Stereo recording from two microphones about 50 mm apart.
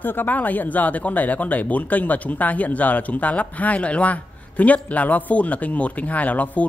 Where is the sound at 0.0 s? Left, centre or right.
Left.